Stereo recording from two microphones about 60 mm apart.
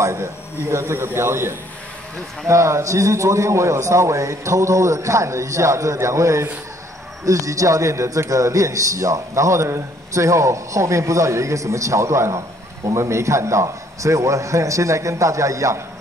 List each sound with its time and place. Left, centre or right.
0.0 s a man's voice: right